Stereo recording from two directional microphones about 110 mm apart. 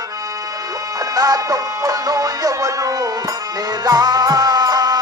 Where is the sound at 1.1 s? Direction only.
35° right (ahead or behind).